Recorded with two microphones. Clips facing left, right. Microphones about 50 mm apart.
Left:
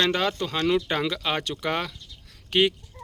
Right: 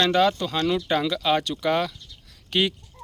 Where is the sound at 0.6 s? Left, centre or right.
Centre.